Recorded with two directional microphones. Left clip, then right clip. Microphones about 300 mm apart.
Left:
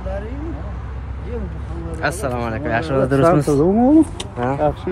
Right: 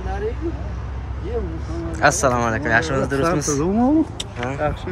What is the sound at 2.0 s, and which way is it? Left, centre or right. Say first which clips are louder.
Speech: right 5 dB; centre.